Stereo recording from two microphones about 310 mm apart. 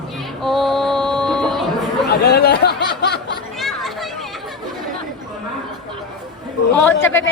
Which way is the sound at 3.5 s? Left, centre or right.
Centre.